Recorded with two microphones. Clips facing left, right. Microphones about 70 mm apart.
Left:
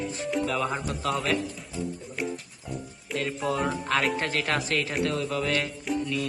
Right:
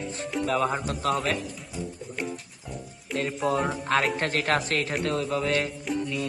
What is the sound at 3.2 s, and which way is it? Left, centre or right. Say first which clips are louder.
Speech: right 2 dB; right.